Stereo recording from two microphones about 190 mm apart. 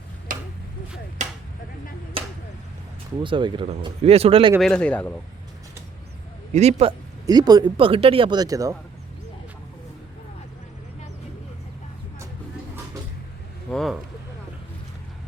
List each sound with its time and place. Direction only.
0.3 s tick-tock: 45° right (ahead or behind)
1.2 s a sound: 40° right (ahead or behind)
3.2 s speech: 25° right (ahead or behind)
4.6 s speech: 5° left (ahead or behind)
6.5 s a man's voice: 35° right (ahead or behind)
7.3 s speech: 20° right (ahead or behind)
13.7 s speech: centre (ahead or behind)